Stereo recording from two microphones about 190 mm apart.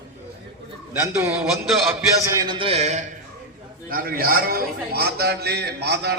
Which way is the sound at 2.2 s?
25° right (ahead or behind).